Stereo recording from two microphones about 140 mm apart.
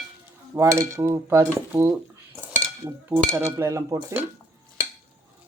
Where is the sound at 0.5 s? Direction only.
20° right (ahead or behind).